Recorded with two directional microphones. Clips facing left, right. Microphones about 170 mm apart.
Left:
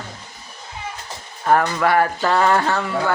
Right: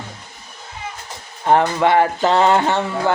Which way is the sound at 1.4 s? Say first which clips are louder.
Right 2 dB; 25° right (ahead or behind).